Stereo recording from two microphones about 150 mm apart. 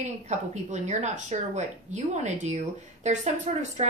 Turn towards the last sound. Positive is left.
turn(degrees=-50)  # may be behind; listen again after turning